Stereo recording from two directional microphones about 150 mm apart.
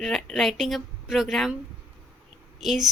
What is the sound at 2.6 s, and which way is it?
Speech, centre (ahead or behind).